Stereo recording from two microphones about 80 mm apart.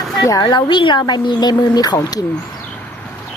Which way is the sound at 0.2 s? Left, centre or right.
Left.